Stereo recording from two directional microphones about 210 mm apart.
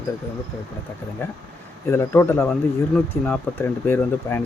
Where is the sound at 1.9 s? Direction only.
10° left (ahead or behind).